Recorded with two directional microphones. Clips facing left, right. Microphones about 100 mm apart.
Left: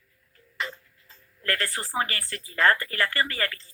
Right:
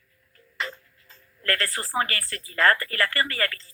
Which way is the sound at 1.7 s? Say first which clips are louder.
Right 1 dB; 35° right (ahead or behind).